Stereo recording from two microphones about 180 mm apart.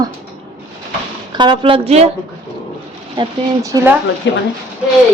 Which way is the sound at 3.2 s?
15° right (ahead or behind).